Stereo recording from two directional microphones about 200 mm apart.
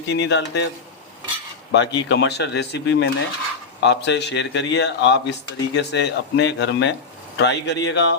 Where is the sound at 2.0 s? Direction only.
60° left (ahead or behind).